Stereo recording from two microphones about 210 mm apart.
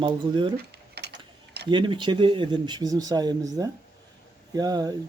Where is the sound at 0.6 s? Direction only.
50° right (ahead or behind).